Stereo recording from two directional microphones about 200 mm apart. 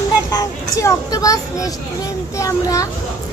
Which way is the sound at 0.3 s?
15° left (ahead or behind).